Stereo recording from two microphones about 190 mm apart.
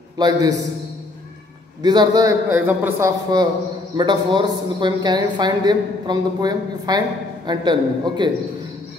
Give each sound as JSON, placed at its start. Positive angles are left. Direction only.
{"t": 0.2, "sound": "a woman's voice", "side_deg": -20}
{"t": 1.8, "sound": "a woman's voice", "side_deg": -20}
{"t": 2.6, "sound": "speech", "side_deg": -10}
{"t": 3.3, "sound": "a woman's voice", "side_deg": -20}